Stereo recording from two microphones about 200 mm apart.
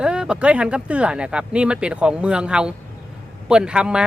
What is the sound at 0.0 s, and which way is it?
Speech, 5° right (ahead or behind).